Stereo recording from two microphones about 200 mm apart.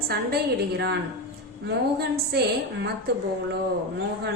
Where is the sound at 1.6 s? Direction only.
55° right (ahead or behind).